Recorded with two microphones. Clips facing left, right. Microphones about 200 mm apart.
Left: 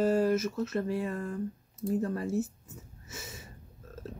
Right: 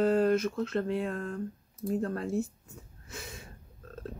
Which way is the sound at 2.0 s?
60° right (ahead or behind).